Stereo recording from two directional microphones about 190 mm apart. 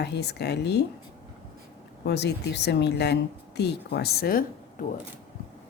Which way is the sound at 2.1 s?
60° left (ahead or behind).